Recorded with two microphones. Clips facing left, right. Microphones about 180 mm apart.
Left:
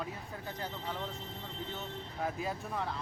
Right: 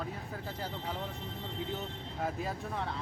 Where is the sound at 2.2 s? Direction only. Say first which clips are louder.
Right 1 dB; centre (ahead or behind).